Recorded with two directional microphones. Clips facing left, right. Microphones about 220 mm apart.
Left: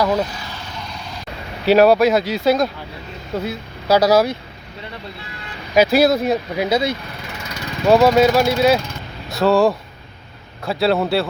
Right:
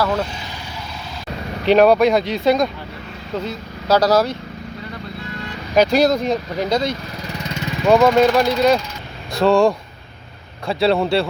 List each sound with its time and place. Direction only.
0.0 s speech: 15° left (ahead or behind)
1.6 s speech: 5° left (ahead or behind)
5.7 s speech: 5° left (ahead or behind)